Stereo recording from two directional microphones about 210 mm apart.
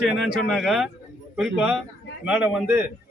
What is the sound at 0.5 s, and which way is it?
A man's voice, centre (ahead or behind).